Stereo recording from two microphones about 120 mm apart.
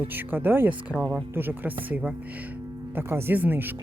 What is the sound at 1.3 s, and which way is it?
Speech, 15° right (ahead or behind).